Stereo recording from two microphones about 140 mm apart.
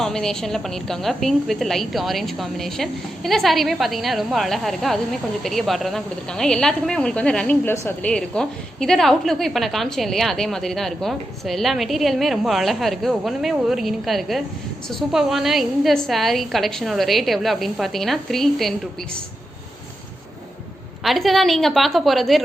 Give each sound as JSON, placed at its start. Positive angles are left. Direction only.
{"t": 0.0, "sound": "a woman's voice", "side_deg": 5}
{"t": 21.0, "sound": "a woman's voice", "side_deg": 0}